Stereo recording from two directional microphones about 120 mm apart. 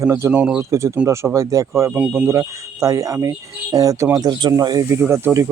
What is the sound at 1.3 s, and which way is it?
Speech, 30° right (ahead or behind).